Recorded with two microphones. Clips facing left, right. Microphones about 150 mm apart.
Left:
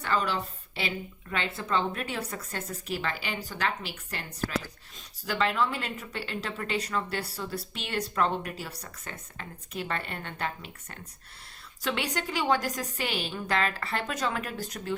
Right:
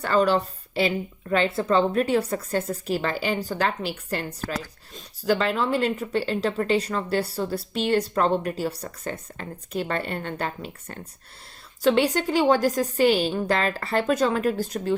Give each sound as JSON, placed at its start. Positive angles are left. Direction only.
{"t": 0.0, "sound": "speech", "side_deg": -40}